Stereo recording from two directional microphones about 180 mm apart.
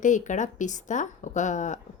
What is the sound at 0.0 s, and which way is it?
Speech, 45° left (ahead or behind).